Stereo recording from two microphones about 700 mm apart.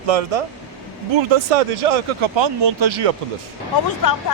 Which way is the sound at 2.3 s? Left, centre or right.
Right.